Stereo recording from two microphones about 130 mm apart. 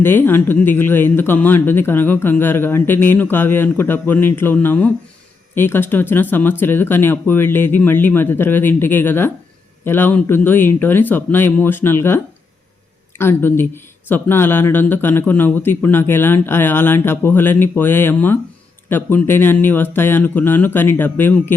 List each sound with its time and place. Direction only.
0.0 s speech: 15° left (ahead or behind)